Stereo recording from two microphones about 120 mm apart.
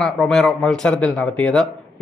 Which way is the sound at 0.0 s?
5° left (ahead or behind).